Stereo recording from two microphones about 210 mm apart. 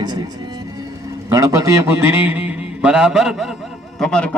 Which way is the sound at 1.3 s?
15° right (ahead or behind).